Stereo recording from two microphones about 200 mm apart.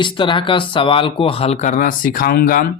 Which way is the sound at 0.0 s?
25° left (ahead or behind).